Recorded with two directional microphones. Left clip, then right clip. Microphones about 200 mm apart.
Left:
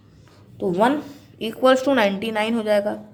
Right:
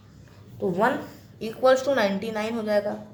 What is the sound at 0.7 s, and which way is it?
A woman's voice, 50° left (ahead or behind).